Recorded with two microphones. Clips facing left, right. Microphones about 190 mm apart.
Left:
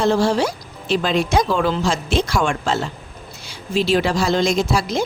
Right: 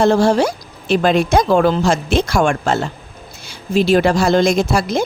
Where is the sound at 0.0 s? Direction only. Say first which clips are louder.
Right 4 dB; 50° right (ahead or behind).